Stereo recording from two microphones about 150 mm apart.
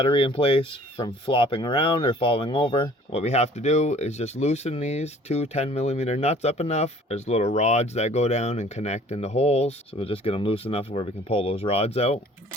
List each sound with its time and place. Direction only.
0.0 s speech: 35° left (ahead or behind)